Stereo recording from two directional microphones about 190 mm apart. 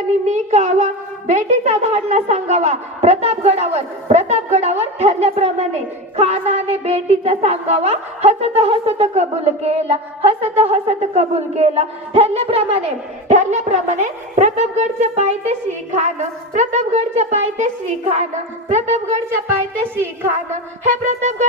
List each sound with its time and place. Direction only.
0.3 s a woman's voice: 40° right (ahead or behind)
20.2 s a woman's voice: 40° right (ahead or behind)